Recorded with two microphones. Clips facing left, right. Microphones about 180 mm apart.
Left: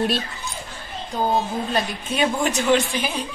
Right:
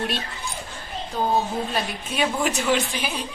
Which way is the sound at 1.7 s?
Centre (ahead or behind).